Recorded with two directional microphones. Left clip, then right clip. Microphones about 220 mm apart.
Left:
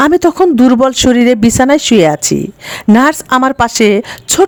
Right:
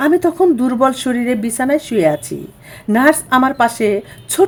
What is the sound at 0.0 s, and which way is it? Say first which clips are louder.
Speech: left 5 dB; 40° left (ahead or behind).